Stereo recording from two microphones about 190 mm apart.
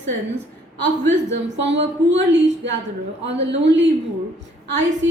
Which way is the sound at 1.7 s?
70° right (ahead or behind).